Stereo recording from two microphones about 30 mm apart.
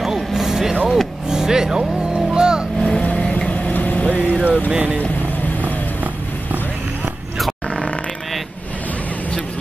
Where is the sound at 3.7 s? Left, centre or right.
Left.